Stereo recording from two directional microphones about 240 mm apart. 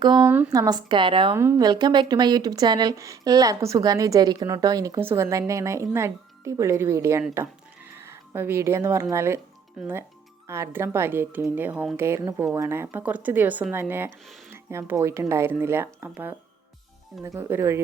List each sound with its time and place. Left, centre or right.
0.3 s speech: centre
10.4 s speech: centre